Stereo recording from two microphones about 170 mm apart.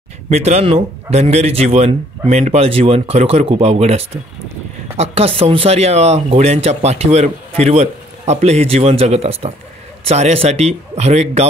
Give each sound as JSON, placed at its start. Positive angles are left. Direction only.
{"t": 0.3, "sound": "speech", "side_deg": -40}